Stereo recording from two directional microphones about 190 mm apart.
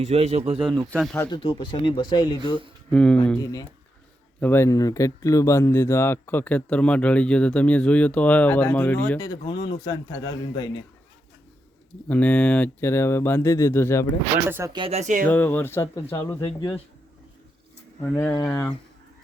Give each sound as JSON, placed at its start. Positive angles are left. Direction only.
{"t": 0.0, "sound": "a man's voice", "side_deg": -35}
{"t": 1.1, "sound": "speech", "side_deg": 15}
{"t": 1.4, "sound": "a man's voice", "side_deg": 25}
{"t": 2.9, "sound": "speech", "side_deg": 5}
{"t": 3.3, "sound": "speech", "side_deg": 15}
{"t": 9.2, "sound": "a man's voice", "side_deg": 20}
{"t": 12.0, "sound": "speech", "side_deg": 10}
{"t": 14.3, "sound": "speech", "side_deg": -10}
{"t": 14.7, "sound": "a man's voice", "side_deg": -30}
{"t": 15.3, "sound": "a man's voice", "side_deg": 10}
{"t": 18.1, "sound": "speech", "side_deg": 10}